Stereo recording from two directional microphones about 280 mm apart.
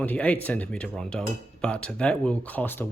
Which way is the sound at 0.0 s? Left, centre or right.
Centre.